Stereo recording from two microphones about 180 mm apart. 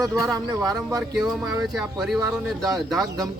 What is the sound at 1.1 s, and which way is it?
Speech, centre (ahead or behind).